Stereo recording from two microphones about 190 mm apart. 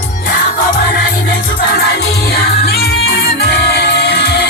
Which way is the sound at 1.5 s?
50° left (ahead or behind).